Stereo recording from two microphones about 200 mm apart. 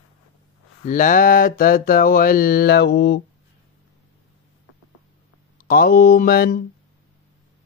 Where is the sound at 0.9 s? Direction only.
40° left (ahead or behind); by 3.2 s 55° left (ahead or behind).